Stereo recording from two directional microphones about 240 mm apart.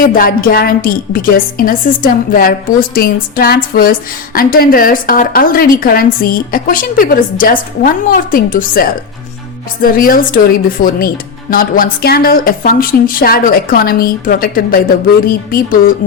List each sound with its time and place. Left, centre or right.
0.0 s a woman's voice: left
10.0 s a woman's voice: left